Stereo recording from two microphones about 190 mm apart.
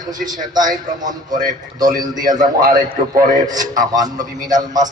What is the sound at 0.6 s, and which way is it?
Speech, 45° right (ahead or behind).